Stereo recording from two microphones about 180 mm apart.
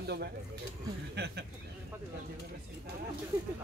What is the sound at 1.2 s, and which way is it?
Speech, 65° right (ahead or behind).